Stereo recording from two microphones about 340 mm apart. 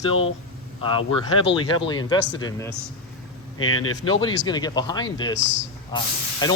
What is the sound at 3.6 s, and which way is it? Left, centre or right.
Speech, left.